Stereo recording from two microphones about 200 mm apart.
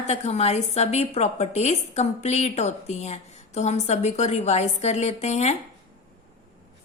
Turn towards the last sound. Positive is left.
turn(degrees=35)  # may be behind; listen again after turning